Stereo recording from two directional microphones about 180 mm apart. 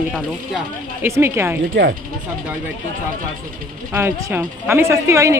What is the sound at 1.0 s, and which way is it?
Speech, 15° right (ahead or behind).